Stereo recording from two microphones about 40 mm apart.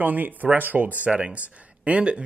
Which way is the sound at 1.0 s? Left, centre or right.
Right.